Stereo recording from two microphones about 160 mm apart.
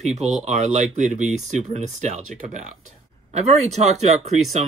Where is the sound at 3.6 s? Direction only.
45° right (ahead or behind).